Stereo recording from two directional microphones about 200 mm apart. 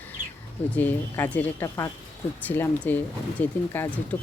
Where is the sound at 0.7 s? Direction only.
10° left (ahead or behind).